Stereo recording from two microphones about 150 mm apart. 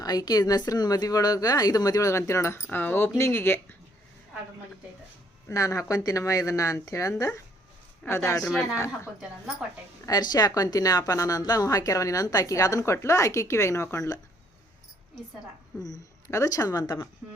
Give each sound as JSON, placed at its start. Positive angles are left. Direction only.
{"t": 0.0, "sound": "a woman's voice", "side_deg": 25}
{"t": 5.5, "sound": "a woman's voice", "side_deg": 20}
{"t": 8.4, "sound": "speech", "side_deg": 0}
{"t": 10.1, "sound": "a woman's voice", "side_deg": 25}
{"t": 15.8, "sound": "a woman's voice", "side_deg": 25}